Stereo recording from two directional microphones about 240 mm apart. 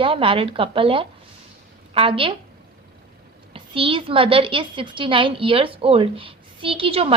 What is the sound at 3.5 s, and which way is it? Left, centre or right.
A woman's voice, right.